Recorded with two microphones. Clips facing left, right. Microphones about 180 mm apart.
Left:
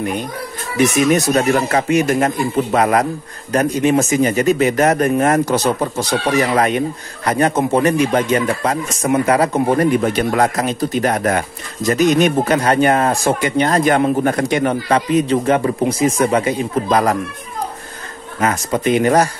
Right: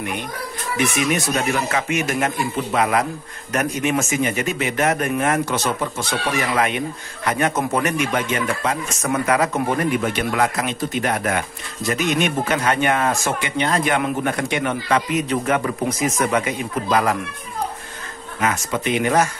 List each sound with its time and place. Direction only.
0.9 s a man's voice: 40° left (ahead or behind)
18.4 s a man's voice: 40° left (ahead or behind)